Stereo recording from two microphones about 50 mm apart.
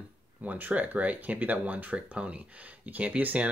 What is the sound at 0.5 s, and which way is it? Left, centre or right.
Speech, right.